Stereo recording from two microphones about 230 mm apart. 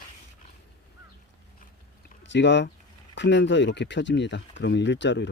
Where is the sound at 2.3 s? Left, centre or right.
Left.